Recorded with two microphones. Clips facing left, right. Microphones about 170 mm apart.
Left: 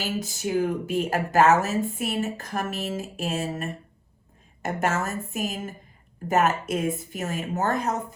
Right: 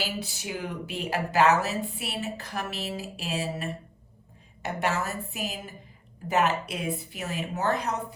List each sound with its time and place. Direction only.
0.1 s speech: 40° left (ahead or behind)
3.2 s music: 45° left (ahead or behind)
4.6 s speech: 40° left (ahead or behind)